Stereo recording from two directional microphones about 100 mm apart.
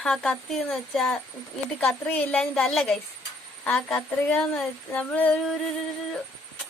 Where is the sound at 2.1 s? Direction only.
20° left (ahead or behind).